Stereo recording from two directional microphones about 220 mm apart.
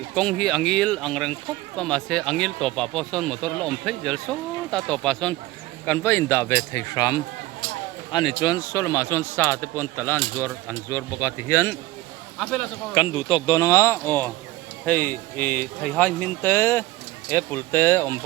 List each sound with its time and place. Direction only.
0.1 s a man's voice: 5° left (ahead or behind)
12.9 s a man's voice: 20° left (ahead or behind)